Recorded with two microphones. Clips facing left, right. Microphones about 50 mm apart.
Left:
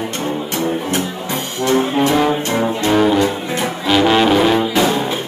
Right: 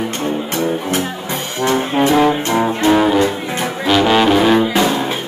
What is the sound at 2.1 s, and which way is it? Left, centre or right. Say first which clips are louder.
Music: right 2 dB; centre.